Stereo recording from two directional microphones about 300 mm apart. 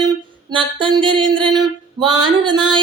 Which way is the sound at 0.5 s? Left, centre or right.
Centre.